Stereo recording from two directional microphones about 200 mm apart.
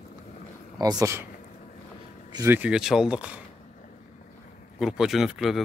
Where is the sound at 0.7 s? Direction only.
20° right (ahead or behind).